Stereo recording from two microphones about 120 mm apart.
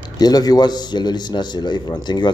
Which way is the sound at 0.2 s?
35° left (ahead or behind).